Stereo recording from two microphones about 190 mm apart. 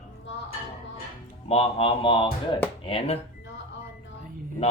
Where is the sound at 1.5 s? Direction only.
30° left (ahead or behind).